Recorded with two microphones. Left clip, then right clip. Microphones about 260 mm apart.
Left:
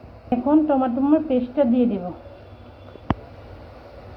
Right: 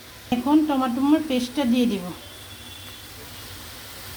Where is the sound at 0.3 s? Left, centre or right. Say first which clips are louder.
Left 2 dB; right.